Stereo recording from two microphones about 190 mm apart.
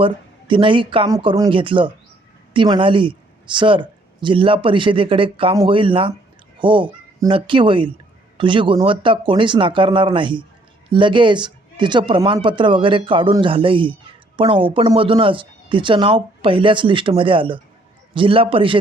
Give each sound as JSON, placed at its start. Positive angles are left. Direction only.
{"t": 0.0, "sound": "speech", "side_deg": -25}